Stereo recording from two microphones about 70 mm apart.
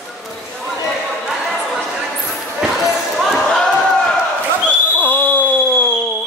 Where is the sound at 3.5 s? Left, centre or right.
Centre.